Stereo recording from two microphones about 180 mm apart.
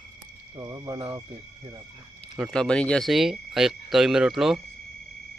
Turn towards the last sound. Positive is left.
turn(degrees=0)  # may be behind; listen again after turning